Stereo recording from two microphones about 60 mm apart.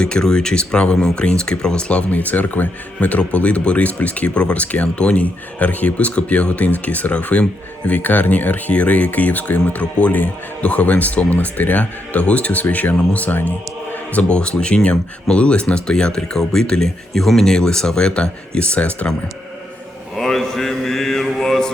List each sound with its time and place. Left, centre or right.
0.0 s speech: centre
20.1 s mantra: centre